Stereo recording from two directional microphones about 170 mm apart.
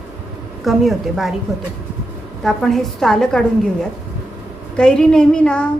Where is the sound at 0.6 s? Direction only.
Centre (ahead or behind).